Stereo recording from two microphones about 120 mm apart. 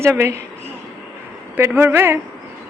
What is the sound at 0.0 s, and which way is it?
Speech, 25° right (ahead or behind).